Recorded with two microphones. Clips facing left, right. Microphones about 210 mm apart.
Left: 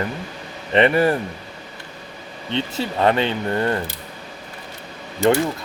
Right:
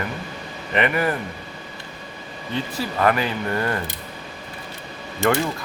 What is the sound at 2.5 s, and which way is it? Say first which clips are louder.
Speech: left 2 dB; 25° left (ahead or behind).